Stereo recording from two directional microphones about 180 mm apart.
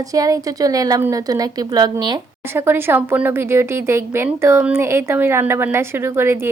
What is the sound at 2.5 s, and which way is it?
A woman's voice, 10° right (ahead or behind).